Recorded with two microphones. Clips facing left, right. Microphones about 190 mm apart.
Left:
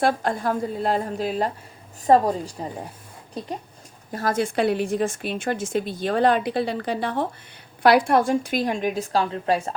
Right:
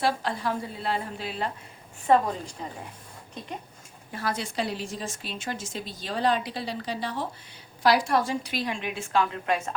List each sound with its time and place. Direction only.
0.0 s a woman's voice: 50° left (ahead or behind)
4.1 s a woman's voice: 45° left (ahead or behind)